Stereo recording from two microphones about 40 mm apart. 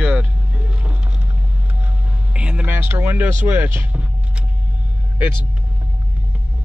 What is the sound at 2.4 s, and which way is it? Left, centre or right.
Speech, right.